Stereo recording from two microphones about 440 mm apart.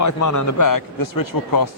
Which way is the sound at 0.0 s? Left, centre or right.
Left.